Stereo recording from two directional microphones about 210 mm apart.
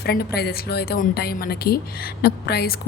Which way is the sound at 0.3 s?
50° left (ahead or behind).